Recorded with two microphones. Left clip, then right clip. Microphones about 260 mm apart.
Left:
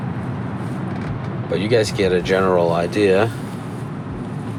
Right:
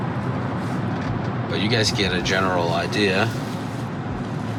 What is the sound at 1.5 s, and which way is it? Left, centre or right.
Speech, left.